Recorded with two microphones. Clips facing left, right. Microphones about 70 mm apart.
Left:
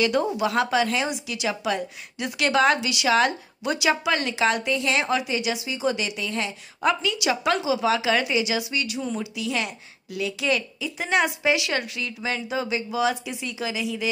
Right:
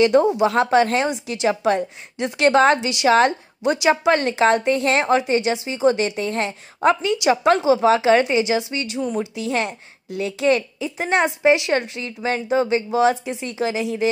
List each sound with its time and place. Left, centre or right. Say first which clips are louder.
0.0 s a woman's voice: right 7 dB; right